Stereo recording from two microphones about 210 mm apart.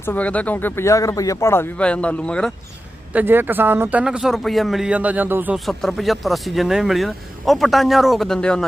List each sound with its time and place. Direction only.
0.0 s speech: 5° left (ahead or behind)
3.1 s speech: 10° right (ahead or behind)